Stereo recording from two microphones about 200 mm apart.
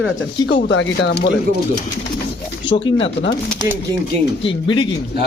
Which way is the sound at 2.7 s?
25° left (ahead or behind).